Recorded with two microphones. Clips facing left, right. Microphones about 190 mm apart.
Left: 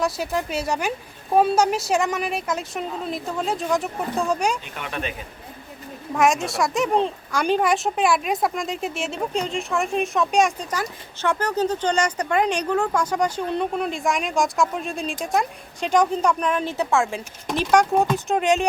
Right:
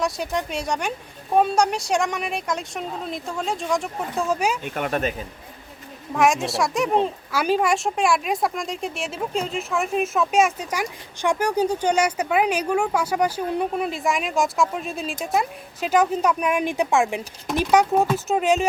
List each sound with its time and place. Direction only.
0.0 s speech: 5° left (ahead or behind)
4.6 s speech: 45° right (ahead or behind)
6.1 s speech: centre (ahead or behind)